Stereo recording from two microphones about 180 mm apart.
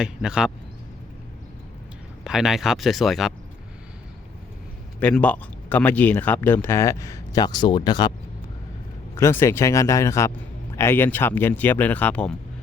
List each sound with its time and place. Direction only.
0.0 s speech: 5° right (ahead or behind)
2.2 s speech: 5° right (ahead or behind)
4.9 s speech: 10° left (ahead or behind); by 8.1 s 25° left (ahead or behind)
9.1 s speech: 15° left (ahead or behind)